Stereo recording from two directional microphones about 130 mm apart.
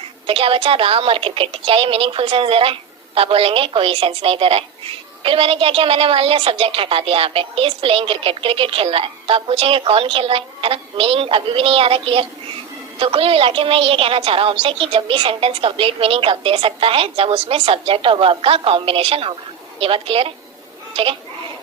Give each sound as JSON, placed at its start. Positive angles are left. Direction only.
{"t": 0.3, "sound": "a woman's voice", "side_deg": -45}